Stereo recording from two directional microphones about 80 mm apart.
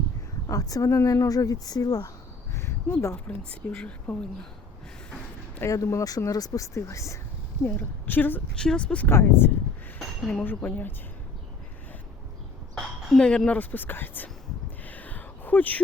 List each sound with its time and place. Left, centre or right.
0.4 s speech: left
3.2 s speech: centre
5.6 s speech: left
7.6 s a woman's voice: left
8.5 s speech: centre
9.0 s a woman's voice: left
10.0 s chink: centre
10.4 s a woman's voice: left
12.7 s speech: centre; by 14.3 s left
14.8 s a sound: centre